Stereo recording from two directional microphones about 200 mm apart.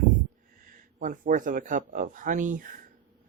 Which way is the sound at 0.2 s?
45° right (ahead or behind).